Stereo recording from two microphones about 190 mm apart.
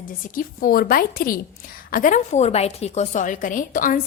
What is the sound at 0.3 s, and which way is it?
A woman's voice, 50° left (ahead or behind).